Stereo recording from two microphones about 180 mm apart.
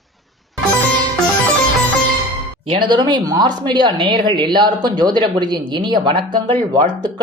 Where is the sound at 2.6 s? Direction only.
25° right (ahead or behind).